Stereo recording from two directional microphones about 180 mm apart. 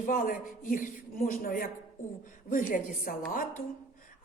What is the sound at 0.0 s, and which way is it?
Speech, 50° left (ahead or behind).